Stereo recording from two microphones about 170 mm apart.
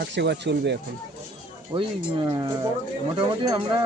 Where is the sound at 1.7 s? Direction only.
30° right (ahead or behind).